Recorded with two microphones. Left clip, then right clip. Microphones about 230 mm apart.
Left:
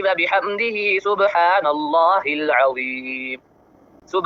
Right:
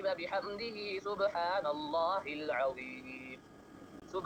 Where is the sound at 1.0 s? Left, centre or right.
Left.